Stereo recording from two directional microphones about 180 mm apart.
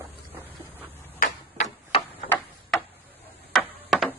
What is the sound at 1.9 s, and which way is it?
Tick-tock, 35° left (ahead or behind).